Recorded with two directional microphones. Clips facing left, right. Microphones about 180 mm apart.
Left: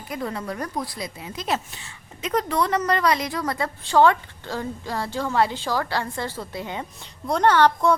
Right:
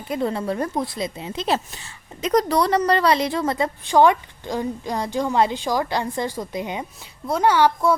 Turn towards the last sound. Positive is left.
turn(degrees=-10)  # may be behind; listen again after turning